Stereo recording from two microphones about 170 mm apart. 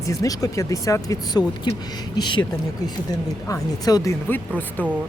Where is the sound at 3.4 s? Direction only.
20° left (ahead or behind).